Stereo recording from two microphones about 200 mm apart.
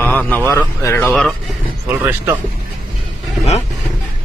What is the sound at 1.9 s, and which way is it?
Speech, 10° right (ahead or behind).